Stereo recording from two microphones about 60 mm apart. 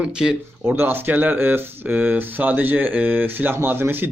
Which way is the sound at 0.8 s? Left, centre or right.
Right.